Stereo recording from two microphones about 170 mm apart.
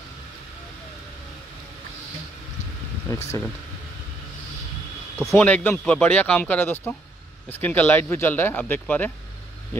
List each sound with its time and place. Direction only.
3.1 s speech: 15° left (ahead or behind)
5.3 s speech: 10° left (ahead or behind)